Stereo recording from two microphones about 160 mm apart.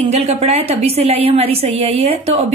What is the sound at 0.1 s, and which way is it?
A woman's voice, 40° right (ahead or behind).